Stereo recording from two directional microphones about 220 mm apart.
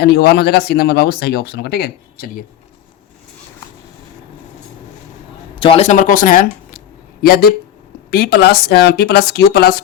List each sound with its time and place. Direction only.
0.0 s speech: 45° left (ahead or behind)
5.5 s speech: 25° left (ahead or behind); by 9.8 s 45° left (ahead or behind)